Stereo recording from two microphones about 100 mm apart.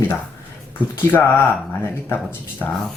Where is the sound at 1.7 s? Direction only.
20° left (ahead or behind).